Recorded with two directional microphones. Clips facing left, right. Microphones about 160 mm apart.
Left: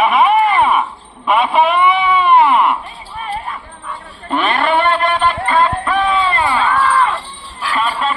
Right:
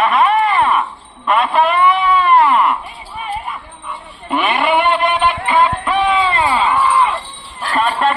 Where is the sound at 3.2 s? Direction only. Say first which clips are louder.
Even; 10° right (ahead or behind).